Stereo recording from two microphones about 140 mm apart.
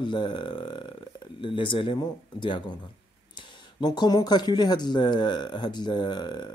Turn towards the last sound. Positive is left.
turn(degrees=30)  # may be behind; listen again after turning